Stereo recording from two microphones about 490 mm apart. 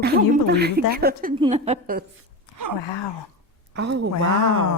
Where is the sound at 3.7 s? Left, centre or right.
Right.